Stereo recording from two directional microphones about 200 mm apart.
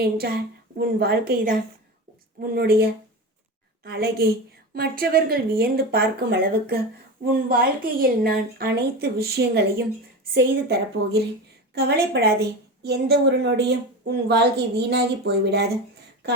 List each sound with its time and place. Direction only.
0.0 s a woman's voice: 50° right (ahead or behind)